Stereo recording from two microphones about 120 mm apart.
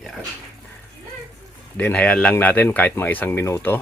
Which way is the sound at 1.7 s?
10° left (ahead or behind).